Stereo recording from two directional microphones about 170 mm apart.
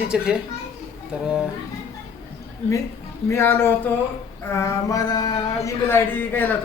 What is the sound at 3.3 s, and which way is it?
Speech, 15° left (ahead or behind).